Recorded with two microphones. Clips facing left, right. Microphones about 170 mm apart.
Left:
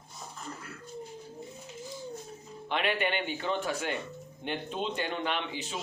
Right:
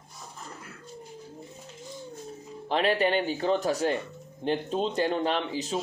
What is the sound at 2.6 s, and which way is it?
Speech, 35° right (ahead or behind).